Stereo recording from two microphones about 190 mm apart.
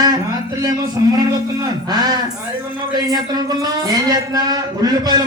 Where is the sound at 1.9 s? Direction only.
20° right (ahead or behind).